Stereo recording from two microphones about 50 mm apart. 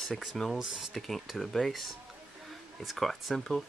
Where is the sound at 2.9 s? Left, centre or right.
Centre.